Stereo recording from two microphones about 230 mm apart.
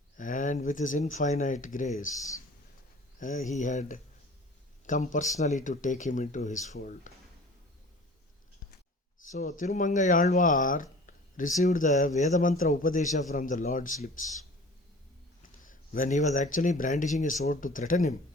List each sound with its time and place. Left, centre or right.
0.2 s speech: left
9.2 s speech: left
15.5 s speech: left